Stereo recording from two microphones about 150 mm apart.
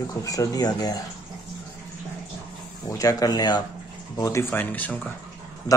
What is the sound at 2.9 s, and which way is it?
A man's voice, 25° left (ahead or behind).